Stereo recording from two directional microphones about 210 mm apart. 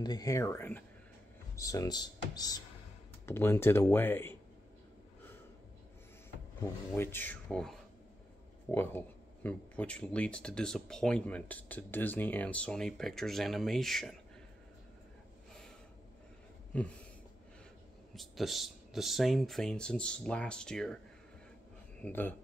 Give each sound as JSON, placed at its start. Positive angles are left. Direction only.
{"t": 0.0, "sound": "speech", "side_deg": 15}
{"t": 6.6, "sound": "speech", "side_deg": 10}
{"t": 18.1, "sound": "speech", "side_deg": 0}
{"t": 22.0, "sound": "speech", "side_deg": 10}